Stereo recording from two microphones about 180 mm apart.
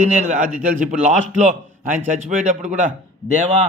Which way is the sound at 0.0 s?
40° right (ahead or behind).